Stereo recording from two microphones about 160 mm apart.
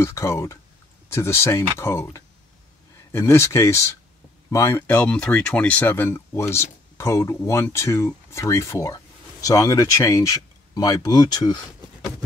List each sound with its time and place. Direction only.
0.0 s speech: 20° left (ahead or behind)